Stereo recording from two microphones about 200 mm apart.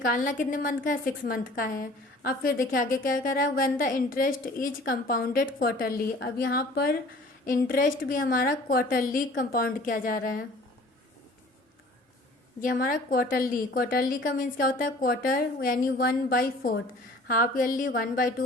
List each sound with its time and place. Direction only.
0.0 s a woman's voice: 40° left (ahead or behind)
12.5 s a woman's voice: 45° left (ahead or behind)